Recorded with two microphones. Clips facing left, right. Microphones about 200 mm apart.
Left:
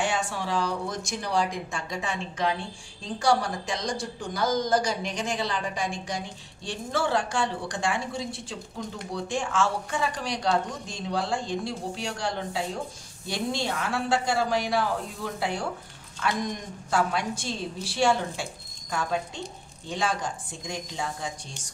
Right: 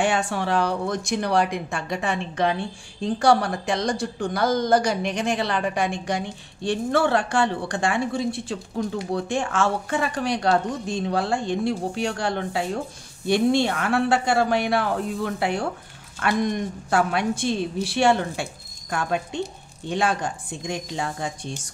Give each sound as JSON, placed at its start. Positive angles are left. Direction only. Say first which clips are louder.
{"t": 0.0, "sound": "a woman's voice", "louder": "right 5 dB", "side_deg": -60}